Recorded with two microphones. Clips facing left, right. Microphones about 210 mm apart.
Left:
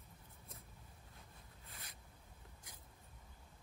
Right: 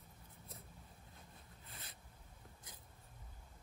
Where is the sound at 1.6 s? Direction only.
30° right (ahead or behind).